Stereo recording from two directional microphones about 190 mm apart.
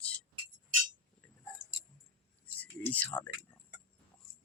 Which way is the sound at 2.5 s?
10° left (ahead or behind).